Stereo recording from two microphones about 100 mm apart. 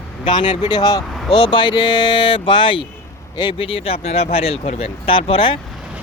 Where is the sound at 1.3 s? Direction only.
60° left (ahead or behind).